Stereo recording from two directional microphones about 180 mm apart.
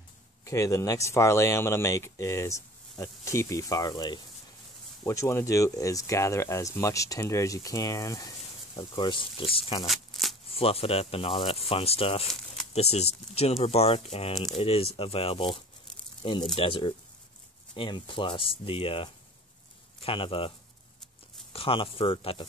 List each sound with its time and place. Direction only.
0.5 s speech: 15° left (ahead or behind)
9.8 s shuffling cards: centre (ahead or behind)
10.5 s speech: 30° left (ahead or behind)
21.5 s speech: 30° left (ahead or behind)